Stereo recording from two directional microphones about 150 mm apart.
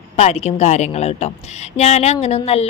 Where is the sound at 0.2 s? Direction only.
45° left (ahead or behind).